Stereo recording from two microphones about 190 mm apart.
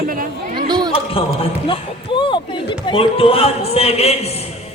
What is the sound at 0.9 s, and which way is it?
Speech, 30° left (ahead or behind).